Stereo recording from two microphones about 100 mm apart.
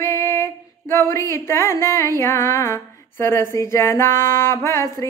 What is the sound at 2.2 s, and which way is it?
Music, 25° left (ahead or behind).